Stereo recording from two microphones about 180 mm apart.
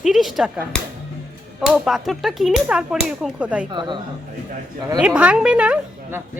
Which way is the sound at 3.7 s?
25° right (ahead or behind).